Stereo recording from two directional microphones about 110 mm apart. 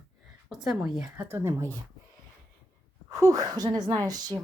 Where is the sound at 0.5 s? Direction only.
5° right (ahead or behind).